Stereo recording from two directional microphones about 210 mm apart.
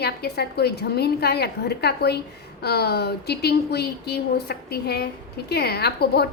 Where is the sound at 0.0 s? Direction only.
50° left (ahead or behind).